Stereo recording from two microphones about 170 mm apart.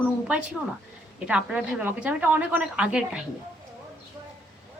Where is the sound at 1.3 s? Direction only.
5° right (ahead or behind).